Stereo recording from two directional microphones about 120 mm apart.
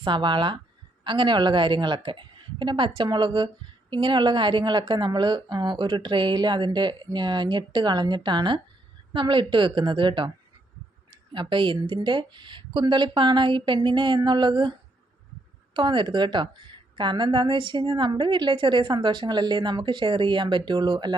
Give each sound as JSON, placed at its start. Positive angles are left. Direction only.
{"t": 0.0, "sound": "a woman's voice", "side_deg": -40}
{"t": 11.3, "sound": "a woman's voice", "side_deg": -45}